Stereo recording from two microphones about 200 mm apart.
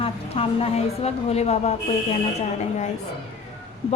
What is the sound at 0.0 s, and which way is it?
A woman's voice, 30° left (ahead or behind).